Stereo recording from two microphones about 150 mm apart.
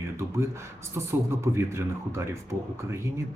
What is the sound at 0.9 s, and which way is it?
Speech, 15° right (ahead or behind).